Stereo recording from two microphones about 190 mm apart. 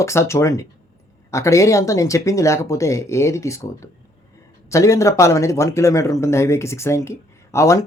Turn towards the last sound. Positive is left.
turn(degrees=15)  # may be behind; listen again after turning